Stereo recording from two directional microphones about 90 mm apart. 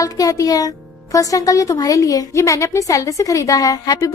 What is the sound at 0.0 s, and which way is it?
A woman's voice, 40° left (ahead or behind).